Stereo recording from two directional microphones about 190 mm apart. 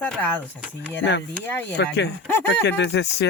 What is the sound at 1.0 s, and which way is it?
Speech, 70° left (ahead or behind).